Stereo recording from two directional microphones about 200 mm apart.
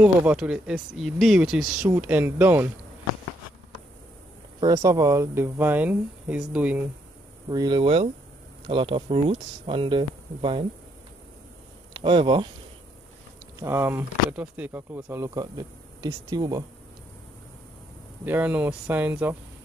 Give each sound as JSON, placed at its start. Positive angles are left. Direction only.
{"t": 0.0, "sound": "speech", "side_deg": -5}
{"t": 4.6, "sound": "speech", "side_deg": -20}
{"t": 7.4, "sound": "speech", "side_deg": -20}
{"t": 11.9, "sound": "speech", "side_deg": -25}
{"t": 13.6, "sound": "speech", "side_deg": -15}
{"t": 18.2, "sound": "speech", "side_deg": -10}